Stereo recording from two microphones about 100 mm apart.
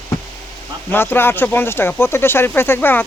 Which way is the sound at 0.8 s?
20° left (ahead or behind).